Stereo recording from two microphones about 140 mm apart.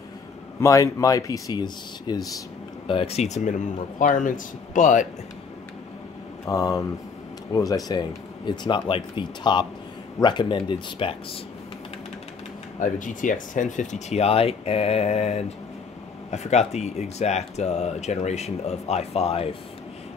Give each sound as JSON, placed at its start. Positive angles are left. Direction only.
{"t": 0.6, "sound": "speech", "side_deg": 20}
{"t": 2.9, "sound": "speech", "side_deg": 45}
{"t": 6.4, "sound": "speech", "side_deg": 25}
{"t": 12.8, "sound": "speech", "side_deg": 65}